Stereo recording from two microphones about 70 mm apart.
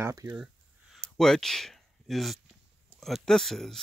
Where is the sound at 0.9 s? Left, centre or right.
Centre.